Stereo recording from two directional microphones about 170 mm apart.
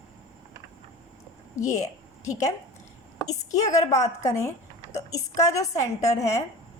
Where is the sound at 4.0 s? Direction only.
20° left (ahead or behind).